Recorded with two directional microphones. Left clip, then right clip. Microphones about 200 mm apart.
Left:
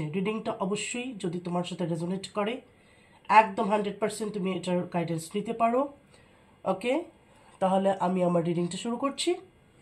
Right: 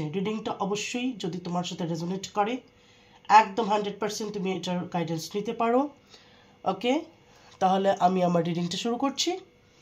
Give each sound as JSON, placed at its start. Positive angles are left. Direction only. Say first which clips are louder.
{"t": 0.1, "sound": "speech", "louder": "left 2 dB", "side_deg": -35}